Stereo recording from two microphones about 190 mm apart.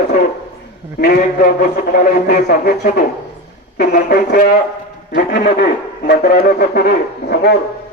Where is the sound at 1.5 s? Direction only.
55° left (ahead or behind).